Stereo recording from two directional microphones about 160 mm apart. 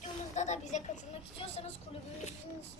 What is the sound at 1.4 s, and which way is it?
Vehicle, 40° left (ahead or behind).